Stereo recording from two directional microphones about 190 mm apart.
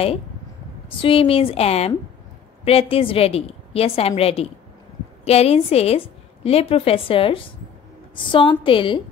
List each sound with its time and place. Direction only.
0.8 s a woman's voice: 30° left (ahead or behind)